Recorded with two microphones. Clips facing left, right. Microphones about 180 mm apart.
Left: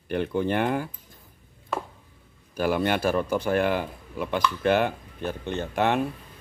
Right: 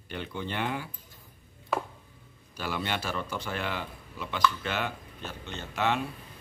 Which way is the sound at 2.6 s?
50° left (ahead or behind).